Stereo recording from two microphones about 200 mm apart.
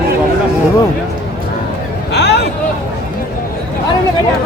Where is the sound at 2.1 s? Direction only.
55° left (ahead or behind).